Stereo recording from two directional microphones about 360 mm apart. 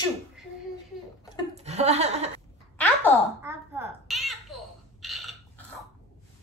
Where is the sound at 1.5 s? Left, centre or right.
Centre.